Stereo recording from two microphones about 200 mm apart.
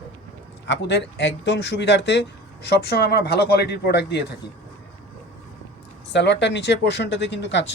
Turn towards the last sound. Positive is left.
turn(degrees=60)  # may be behind; listen again after turning